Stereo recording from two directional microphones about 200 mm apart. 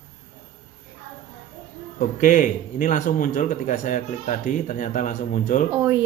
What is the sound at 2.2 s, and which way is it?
A man's voice, 40° left (ahead or behind).